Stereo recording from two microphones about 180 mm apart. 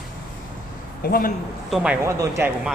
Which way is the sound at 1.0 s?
55° left (ahead or behind).